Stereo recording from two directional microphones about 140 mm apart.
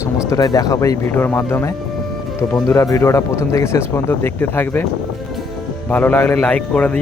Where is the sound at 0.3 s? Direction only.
25° left (ahead or behind).